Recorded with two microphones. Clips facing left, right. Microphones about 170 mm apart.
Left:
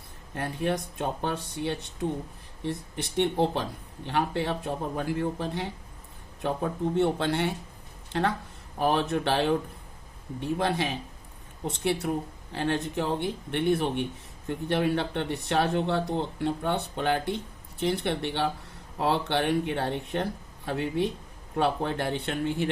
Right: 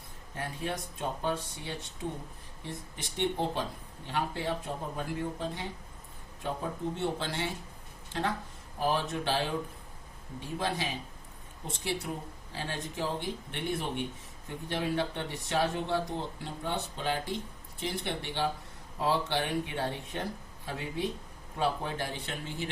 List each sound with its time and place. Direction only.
0.3 s speech: 65° left (ahead or behind)
8.8 s speech: 65° left (ahead or behind)
10.4 s speech: 65° left (ahead or behind)